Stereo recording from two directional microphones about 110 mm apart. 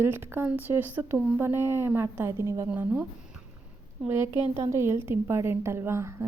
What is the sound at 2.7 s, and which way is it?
Speech, 15° right (ahead or behind).